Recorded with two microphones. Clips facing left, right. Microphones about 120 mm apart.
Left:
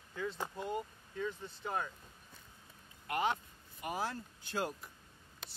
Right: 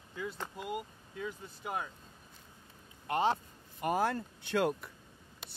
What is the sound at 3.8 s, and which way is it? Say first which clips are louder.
Speech: right 8 dB; 50° right (ahead or behind).